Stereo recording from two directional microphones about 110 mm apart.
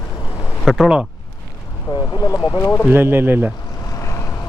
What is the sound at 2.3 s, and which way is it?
Speech, 35° left (ahead or behind).